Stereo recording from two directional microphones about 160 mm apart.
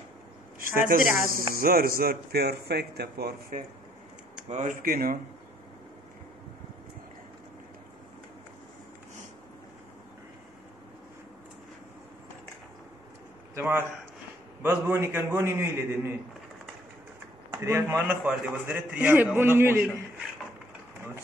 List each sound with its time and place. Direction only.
0.6 s a sound: 60° right (ahead or behind)
1.3 s speech: 65° right (ahead or behind)
4.5 s speech: 50° right (ahead or behind)
13.6 s a man's voice: 15° right (ahead or behind)
17.6 s a man's voice: 15° right (ahead or behind)
18.2 s a man's voice: 5° right (ahead or behind)